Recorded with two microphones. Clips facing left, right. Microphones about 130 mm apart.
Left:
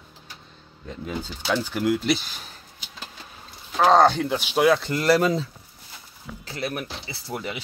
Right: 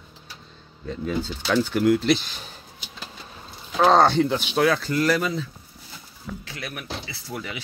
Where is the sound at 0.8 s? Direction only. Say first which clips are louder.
Right 5 dB; 10° left (ahead or behind).